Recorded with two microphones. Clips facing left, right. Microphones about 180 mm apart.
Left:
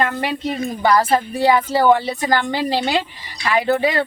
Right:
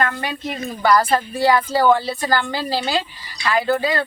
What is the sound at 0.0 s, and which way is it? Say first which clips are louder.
A woman's voice: left 3 dB; 25° left (ahead or behind).